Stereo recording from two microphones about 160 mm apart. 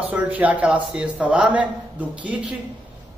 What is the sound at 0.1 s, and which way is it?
A man's voice, 10° right (ahead or behind).